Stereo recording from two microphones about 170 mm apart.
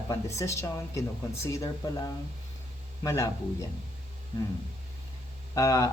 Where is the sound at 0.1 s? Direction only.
15° left (ahead or behind).